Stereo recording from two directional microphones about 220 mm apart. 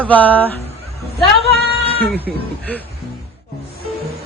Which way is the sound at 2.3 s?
5° right (ahead or behind).